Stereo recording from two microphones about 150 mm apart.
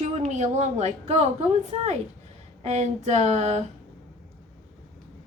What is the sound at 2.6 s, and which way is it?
A woman's voice, 50° right (ahead or behind).